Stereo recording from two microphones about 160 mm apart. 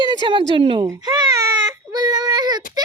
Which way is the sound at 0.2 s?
30° right (ahead or behind).